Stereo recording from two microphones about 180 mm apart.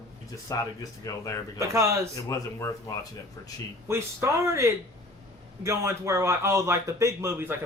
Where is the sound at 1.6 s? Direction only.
15° right (ahead or behind).